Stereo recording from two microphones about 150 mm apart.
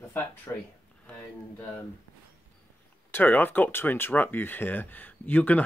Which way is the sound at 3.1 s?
10° left (ahead or behind).